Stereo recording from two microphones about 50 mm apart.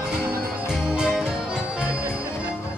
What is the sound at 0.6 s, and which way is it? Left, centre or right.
Music, centre.